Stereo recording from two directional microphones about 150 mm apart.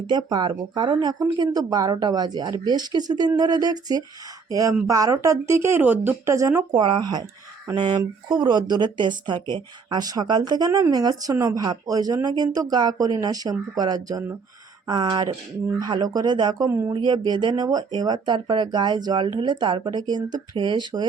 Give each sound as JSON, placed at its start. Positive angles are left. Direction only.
{"t": 0.1, "sound": "speech", "side_deg": -30}